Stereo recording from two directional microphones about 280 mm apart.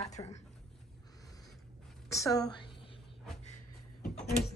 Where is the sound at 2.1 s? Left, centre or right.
Centre.